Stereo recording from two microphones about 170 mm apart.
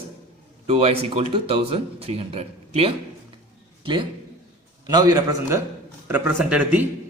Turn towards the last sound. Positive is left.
turn(degrees=-10)  # may be behind; listen again after turning